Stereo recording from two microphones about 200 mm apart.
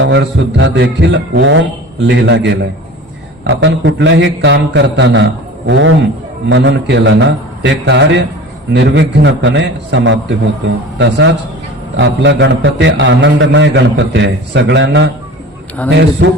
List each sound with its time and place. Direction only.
0.0 s a man's voice: 60° right (ahead or behind)
3.4 s a man's voice: 80° right
15.8 s a man's voice: 5° left (ahead or behind)
16.2 s a man's voice: 65° right (ahead or behind)